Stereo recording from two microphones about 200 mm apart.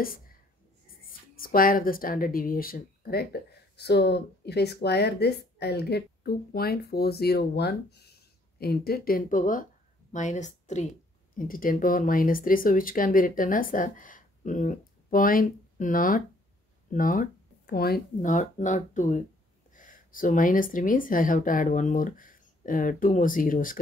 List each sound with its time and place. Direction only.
1.4 s speech: 45° left (ahead or behind)